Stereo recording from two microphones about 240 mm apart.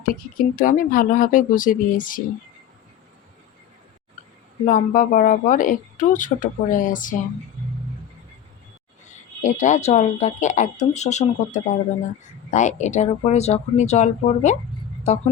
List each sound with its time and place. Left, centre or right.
0.0 s speech: left
4.6 s speech: left
9.4 s speech: left